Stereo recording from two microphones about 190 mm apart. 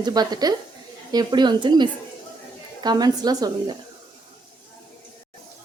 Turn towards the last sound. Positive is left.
turn(degrees=-20)  # may be behind; listen again after turning